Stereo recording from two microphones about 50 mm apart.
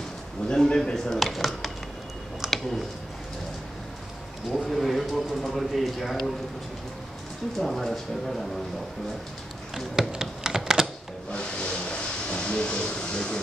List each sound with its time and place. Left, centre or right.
0.5 s speech: centre
2.4 s a sound: centre
4.5 s a sound: centre
7.5 s speech: centre
9.8 s computer keyboard: centre
11.3 s vehicle: centre